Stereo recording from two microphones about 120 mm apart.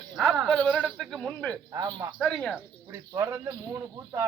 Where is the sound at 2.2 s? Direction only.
5° left (ahead or behind).